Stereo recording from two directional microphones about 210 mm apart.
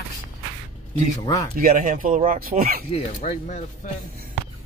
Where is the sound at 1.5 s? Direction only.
40° right (ahead or behind).